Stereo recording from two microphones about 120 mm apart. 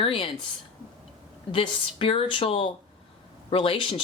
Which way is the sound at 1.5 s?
50° left (ahead or behind).